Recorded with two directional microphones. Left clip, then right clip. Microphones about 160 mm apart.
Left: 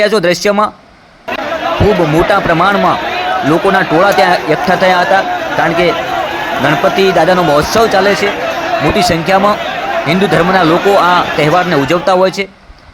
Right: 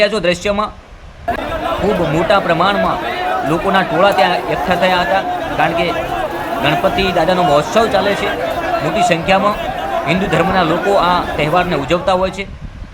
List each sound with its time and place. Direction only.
0.0 s a man's voice: 35° left (ahead or behind)
2.3 s a man's voice: 40° left (ahead or behind)
6.7 s a man's voice: 35° left (ahead or behind)